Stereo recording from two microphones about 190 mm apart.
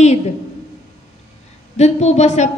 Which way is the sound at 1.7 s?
35° left (ahead or behind).